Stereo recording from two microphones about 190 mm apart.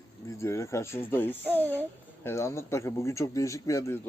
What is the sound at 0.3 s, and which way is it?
Speech, 15° left (ahead or behind).